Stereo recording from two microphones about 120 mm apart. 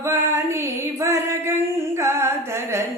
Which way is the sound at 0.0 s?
20° right (ahead or behind).